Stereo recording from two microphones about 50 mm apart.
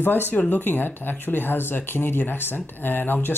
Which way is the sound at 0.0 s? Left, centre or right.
Left.